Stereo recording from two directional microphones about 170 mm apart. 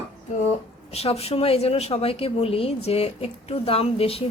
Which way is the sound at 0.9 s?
35° left (ahead or behind).